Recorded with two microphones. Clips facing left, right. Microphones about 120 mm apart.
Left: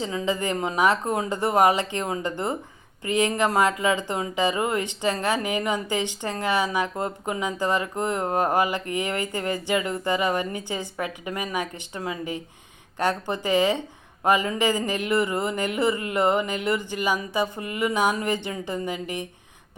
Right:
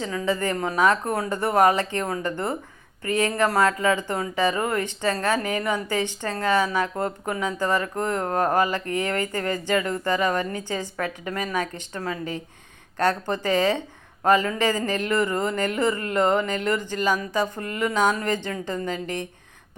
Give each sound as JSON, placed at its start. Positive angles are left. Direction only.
{"t": 0.0, "sound": "speech", "side_deg": 20}